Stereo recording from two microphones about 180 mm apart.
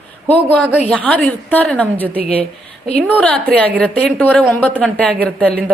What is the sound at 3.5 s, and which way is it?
A man's voice, 5° left (ahead or behind).